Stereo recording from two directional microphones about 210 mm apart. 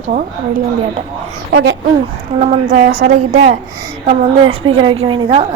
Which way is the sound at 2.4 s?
40° right (ahead or behind).